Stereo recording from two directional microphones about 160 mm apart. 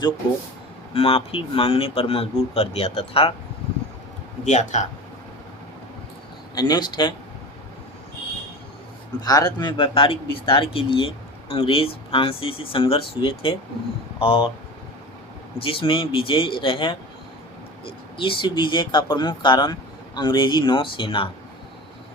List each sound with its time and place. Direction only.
0.9 s speech: 35° left (ahead or behind)
4.4 s speech: 50° left (ahead or behind)
6.5 s speech: 25° left (ahead or behind)
9.2 s speech: 25° left (ahead or behind)
15.6 s speech: 35° left (ahead or behind)